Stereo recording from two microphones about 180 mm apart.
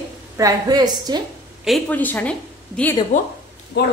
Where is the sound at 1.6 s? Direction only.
5° left (ahead or behind).